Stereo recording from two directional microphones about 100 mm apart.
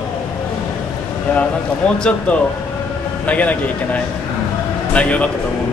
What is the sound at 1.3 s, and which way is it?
A man's voice, 20° left (ahead or behind).